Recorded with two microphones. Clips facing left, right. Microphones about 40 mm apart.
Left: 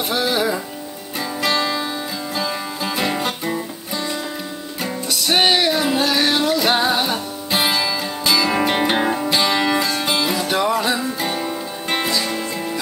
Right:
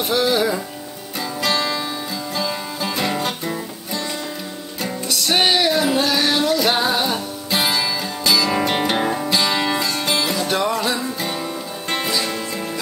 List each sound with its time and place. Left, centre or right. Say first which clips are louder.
0.1 s music: right 2 dB; centre